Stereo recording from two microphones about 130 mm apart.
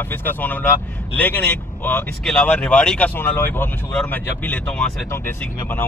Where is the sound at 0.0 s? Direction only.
15° left (ahead or behind).